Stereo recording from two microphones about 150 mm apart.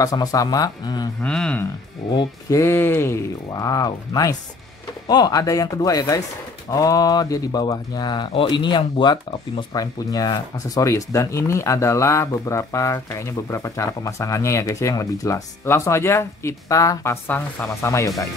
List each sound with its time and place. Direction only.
0.0 s speech: 25° left (ahead or behind)
1.2 s speech: 5° left (ahead or behind)
2.1 s speech: 20° left (ahead or behind)